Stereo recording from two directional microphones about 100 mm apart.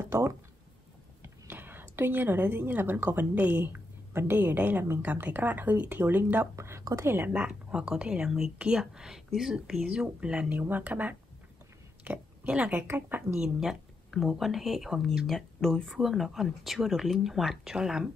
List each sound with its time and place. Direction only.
0.0 s speech: 30° right (ahead or behind)
6.5 s speech: 30° right (ahead or behind); by 12.8 s 10° right (ahead or behind)
12.8 s a woman's voice: 25° right (ahead or behind)
13.4 s speech: 5° right (ahead or behind)